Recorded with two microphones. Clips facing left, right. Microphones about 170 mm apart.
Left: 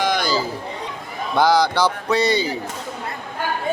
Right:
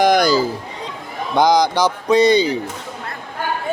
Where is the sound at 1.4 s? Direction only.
15° right (ahead or behind).